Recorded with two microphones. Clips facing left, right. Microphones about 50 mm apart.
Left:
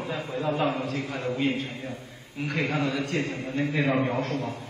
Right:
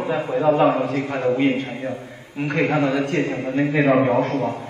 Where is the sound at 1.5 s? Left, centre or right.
Centre.